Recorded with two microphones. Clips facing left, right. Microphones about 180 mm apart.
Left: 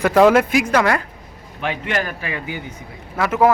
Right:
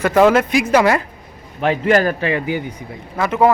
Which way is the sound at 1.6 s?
40° right (ahead or behind).